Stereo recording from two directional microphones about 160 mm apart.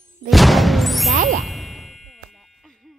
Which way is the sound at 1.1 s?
55° right (ahead or behind).